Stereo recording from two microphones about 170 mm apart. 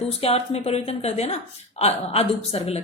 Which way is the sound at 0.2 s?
40° left (ahead or behind).